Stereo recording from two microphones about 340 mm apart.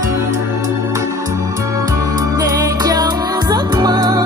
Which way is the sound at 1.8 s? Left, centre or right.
Centre.